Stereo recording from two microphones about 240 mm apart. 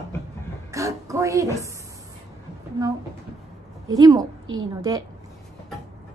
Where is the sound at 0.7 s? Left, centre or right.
Centre.